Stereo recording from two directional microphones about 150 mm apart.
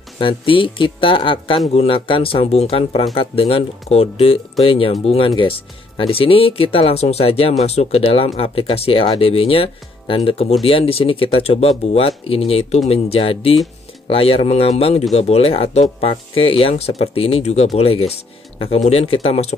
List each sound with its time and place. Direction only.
0.2 s speech: 35° left (ahead or behind)